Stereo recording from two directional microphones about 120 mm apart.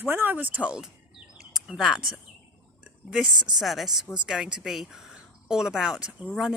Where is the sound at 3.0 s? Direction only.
5° right (ahead or behind).